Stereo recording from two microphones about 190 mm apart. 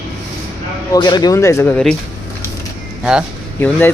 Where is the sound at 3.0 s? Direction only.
5° right (ahead or behind).